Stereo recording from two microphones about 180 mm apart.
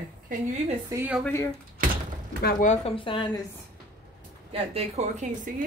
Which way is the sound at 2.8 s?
30° left (ahead or behind).